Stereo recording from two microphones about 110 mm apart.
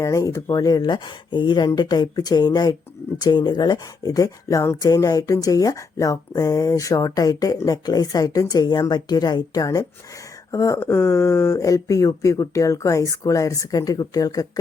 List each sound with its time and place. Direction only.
0.0 s speech: 30° left (ahead or behind)